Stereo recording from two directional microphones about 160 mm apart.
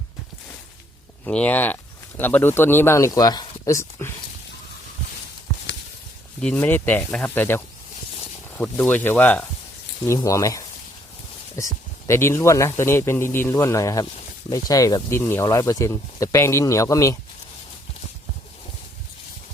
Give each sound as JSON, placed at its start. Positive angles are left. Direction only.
{"t": 1.2, "sound": "speech", "side_deg": 5}
{"t": 6.4, "sound": "speech", "side_deg": 10}
{"t": 8.6, "sound": "speech", "side_deg": 10}